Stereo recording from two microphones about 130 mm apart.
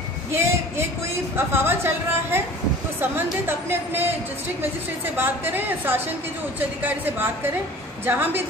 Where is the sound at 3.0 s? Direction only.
15° right (ahead or behind).